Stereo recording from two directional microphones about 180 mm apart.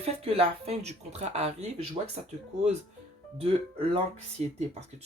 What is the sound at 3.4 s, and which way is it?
Speech, 30° right (ahead or behind).